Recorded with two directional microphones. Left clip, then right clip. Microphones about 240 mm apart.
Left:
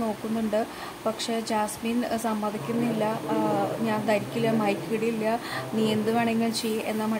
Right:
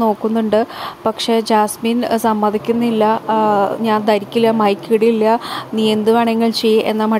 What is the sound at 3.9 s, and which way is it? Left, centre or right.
A woman's voice, right.